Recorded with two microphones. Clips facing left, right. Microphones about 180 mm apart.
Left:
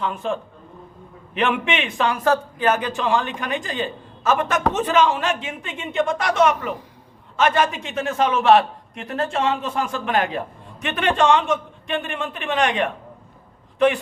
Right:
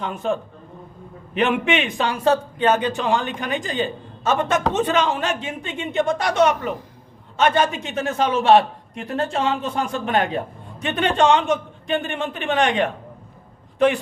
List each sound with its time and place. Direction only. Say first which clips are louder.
0.0 s a man's voice: right 1 dB; 40° right (ahead or behind)